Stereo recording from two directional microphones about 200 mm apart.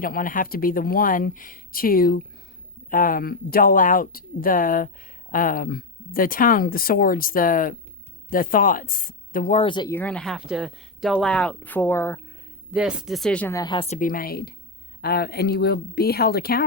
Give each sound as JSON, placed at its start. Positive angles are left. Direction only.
{"t": 0.0, "sound": "speech", "side_deg": 45}
{"t": 9.6, "sound": "speech", "side_deg": 20}
{"t": 9.9, "sound": "speech", "side_deg": 5}
{"t": 12.7, "sound": "speech", "side_deg": -5}